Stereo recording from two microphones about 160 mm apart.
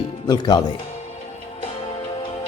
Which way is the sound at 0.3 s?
25° left (ahead or behind).